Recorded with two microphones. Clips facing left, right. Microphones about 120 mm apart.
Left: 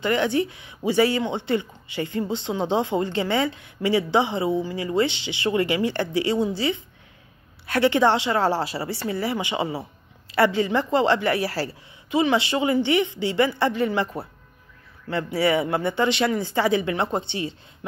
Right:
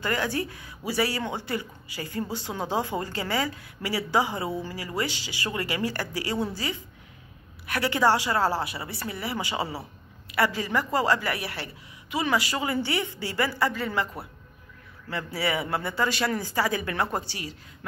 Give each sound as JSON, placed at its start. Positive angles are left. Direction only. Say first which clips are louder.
{"t": 0.0, "sound": "speech", "louder": "left 6 dB", "side_deg": 25}
{"t": 7.6, "sound": "speech", "louder": "left 5 dB", "side_deg": 25}